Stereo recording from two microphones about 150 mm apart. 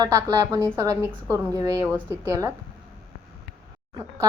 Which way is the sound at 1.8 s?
20° right (ahead or behind).